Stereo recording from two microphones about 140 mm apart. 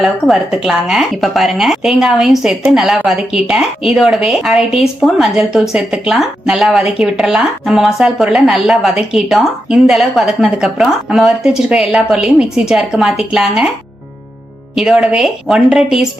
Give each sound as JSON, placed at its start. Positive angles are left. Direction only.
{"t": 0.0, "sound": "speech", "side_deg": 0}
{"t": 14.8, "sound": "speech", "side_deg": -5}